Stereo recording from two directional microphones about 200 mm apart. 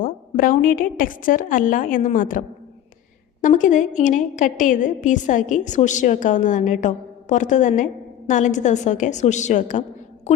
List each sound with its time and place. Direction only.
0.0 s a woman's voice: 45° left (ahead or behind)
3.4 s a woman's voice: 40° left (ahead or behind)